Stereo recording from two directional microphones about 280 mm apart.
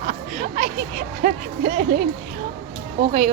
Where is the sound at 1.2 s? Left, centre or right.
Right.